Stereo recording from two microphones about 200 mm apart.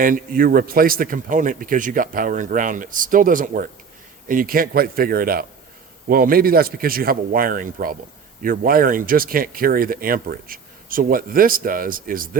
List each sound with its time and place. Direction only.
0.0 s speech: 45° right (ahead or behind)